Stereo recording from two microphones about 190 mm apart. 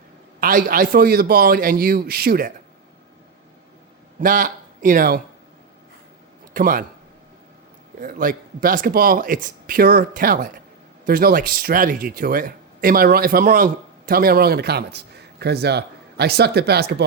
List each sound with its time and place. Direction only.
0.3 s speech: 50° right (ahead or behind)
4.2 s speech: 45° right (ahead or behind)
6.5 s a man's voice: 45° right (ahead or behind)
7.9 s speech: 45° right (ahead or behind)